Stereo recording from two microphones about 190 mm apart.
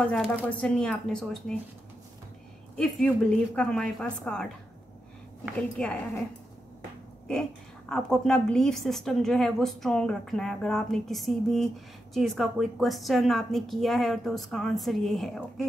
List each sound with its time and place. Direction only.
0.0 s a woman's voice: 5° left (ahead or behind)
2.8 s a woman's voice: 5° left (ahead or behind)
5.6 s a woman's voice: 5° left (ahead or behind)
7.9 s a woman's voice: 5° left (ahead or behind)